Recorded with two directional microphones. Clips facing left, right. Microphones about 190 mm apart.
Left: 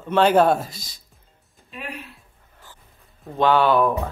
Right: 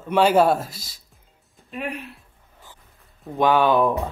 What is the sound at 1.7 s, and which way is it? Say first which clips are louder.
Speech: right 5 dB; 55° right (ahead or behind).